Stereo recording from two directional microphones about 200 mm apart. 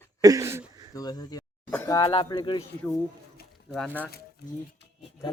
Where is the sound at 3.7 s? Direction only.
5° left (ahead or behind).